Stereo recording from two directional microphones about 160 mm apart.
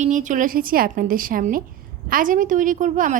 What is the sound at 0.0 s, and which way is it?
A woman's voice, 50° right (ahead or behind).